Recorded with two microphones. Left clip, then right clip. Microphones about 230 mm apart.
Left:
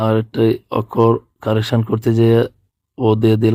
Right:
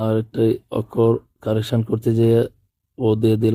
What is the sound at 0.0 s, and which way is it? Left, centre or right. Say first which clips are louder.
Speech: left 4 dB; centre.